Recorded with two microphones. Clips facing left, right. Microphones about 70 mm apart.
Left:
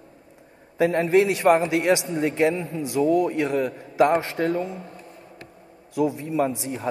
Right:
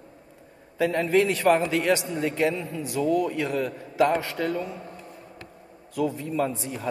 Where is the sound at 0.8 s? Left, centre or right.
Left.